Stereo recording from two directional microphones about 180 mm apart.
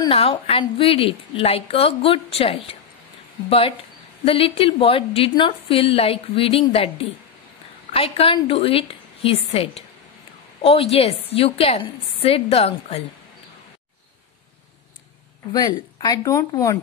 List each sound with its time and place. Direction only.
0.1 s a woman's voice: 35° left (ahead or behind)
15.5 s speech: 20° left (ahead or behind)